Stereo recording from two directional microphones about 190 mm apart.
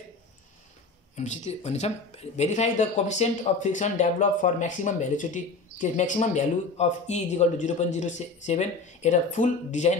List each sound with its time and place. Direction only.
1.1 s speech: 35° left (ahead or behind)